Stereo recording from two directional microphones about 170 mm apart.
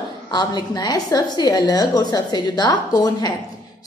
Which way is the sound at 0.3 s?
25° left (ahead or behind).